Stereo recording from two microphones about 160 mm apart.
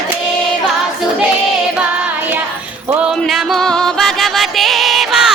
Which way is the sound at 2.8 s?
10° right (ahead or behind).